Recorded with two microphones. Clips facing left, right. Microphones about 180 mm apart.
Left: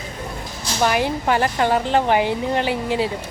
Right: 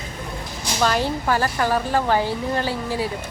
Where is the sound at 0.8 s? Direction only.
15° left (ahead or behind).